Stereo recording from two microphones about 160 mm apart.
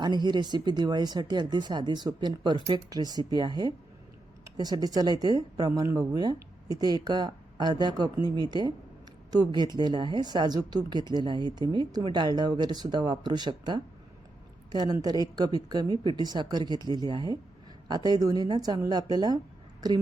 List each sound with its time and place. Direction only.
0.0 s speech: 25° right (ahead or behind)